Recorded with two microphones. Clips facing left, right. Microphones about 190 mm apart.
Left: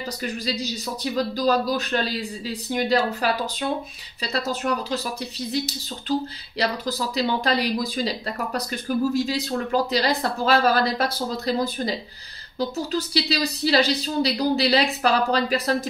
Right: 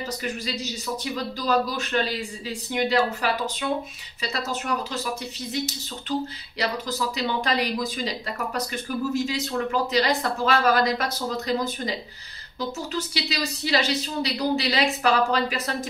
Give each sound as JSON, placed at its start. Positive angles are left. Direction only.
{"t": 1.1, "sound": "a woman's voice", "side_deg": 35}
{"t": 9.1, "sound": "a woman's voice", "side_deg": 35}